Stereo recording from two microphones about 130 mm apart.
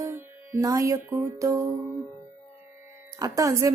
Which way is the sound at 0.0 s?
20° right (ahead or behind).